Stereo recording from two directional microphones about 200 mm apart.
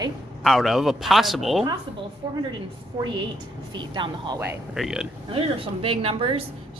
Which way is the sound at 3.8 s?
25° right (ahead or behind).